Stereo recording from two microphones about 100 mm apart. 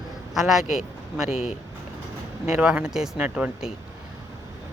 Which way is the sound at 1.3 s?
90° left.